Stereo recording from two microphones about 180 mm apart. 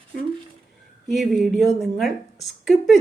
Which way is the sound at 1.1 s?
Centre (ahead or behind).